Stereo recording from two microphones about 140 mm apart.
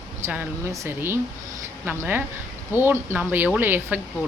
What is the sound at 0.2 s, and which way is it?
Speech, 15° right (ahead or behind).